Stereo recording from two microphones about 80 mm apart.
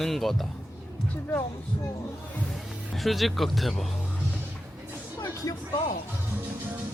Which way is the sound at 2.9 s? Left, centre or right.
Centre.